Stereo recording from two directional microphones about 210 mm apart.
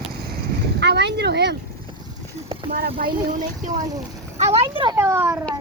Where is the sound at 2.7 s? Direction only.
45° right (ahead or behind); by 4.9 s 25° right (ahead or behind).